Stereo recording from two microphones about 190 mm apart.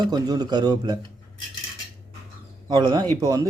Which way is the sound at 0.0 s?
20° right (ahead or behind).